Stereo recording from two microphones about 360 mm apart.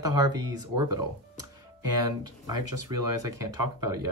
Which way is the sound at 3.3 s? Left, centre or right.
Right.